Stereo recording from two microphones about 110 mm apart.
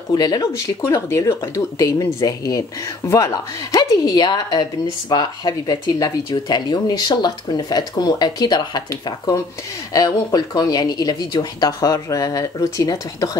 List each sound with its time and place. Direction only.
0.1 s speech: 40° left (ahead or behind)
0.5 s speech: 25° left (ahead or behind)
3.7 s speech: 35° left (ahead or behind)